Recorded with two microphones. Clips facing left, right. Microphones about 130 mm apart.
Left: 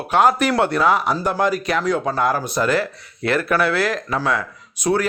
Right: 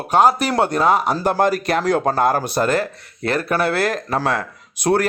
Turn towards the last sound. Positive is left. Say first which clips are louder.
# right 2 dB
turn(degrees=-60)  # may be behind; listen again after turning